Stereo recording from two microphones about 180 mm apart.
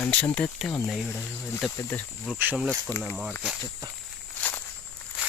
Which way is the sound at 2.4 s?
10° right (ahead or behind).